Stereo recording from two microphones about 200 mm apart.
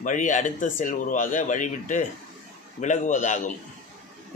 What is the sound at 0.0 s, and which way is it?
A man's voice, 40° left (ahead or behind).